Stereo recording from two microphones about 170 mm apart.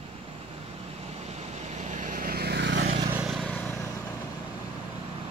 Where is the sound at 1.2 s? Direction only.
40° right (ahead or behind); by 2.8 s 85° right.